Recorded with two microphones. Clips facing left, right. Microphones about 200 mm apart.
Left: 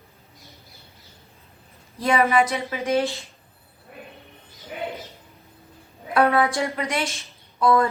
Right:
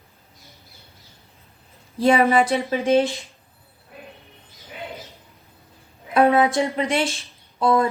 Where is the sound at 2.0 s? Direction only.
30° right (ahead or behind).